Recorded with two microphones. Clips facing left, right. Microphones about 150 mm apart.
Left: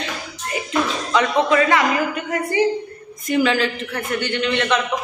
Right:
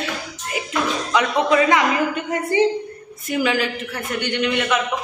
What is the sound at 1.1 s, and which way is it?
A man's voice, 15° right (ahead or behind).